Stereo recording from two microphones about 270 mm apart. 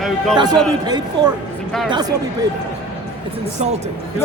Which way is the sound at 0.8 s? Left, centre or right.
Centre.